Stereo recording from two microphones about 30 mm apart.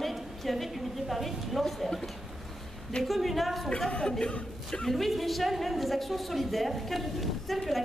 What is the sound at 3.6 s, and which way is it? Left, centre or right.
Speech, left.